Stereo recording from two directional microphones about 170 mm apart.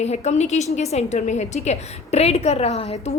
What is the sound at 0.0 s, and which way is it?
A woman's voice, 40° left (ahead or behind).